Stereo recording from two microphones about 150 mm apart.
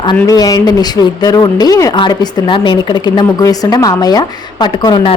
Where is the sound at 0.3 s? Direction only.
25° left (ahead or behind).